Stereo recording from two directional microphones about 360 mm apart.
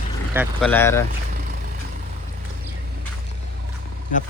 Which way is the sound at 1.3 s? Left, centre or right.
Right.